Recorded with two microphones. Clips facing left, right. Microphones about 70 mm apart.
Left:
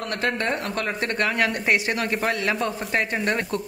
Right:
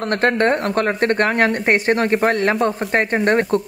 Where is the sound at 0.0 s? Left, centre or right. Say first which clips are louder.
Right 8 dB; right.